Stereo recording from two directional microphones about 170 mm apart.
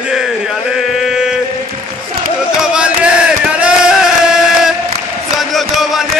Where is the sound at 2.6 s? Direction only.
5° right (ahead or behind).